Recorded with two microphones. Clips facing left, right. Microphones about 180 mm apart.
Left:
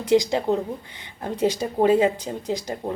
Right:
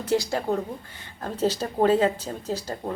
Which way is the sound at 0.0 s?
15° left (ahead or behind).